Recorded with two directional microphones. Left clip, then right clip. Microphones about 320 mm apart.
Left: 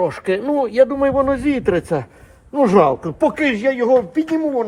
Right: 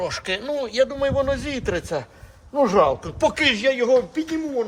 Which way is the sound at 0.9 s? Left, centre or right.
Centre.